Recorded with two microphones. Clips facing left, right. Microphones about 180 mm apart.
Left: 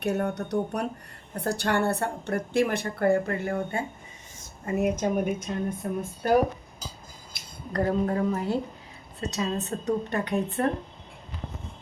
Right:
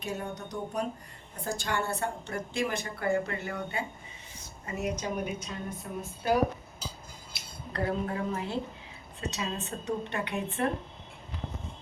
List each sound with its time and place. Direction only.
0.0 s a woman's voice: 65° left (ahead or behind)
7.3 s speech: 45° left (ahead or behind)